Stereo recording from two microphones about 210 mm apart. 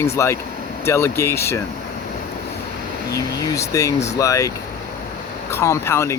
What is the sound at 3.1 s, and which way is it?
Speech, 15° left (ahead or behind).